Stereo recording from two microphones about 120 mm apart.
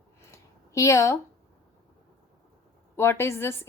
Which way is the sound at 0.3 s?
25° left (ahead or behind).